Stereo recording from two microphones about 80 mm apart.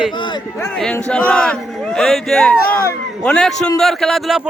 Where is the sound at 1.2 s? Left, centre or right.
Centre.